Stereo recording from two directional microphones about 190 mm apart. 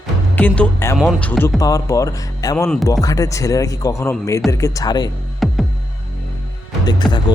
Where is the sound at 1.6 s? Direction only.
15° left (ahead or behind).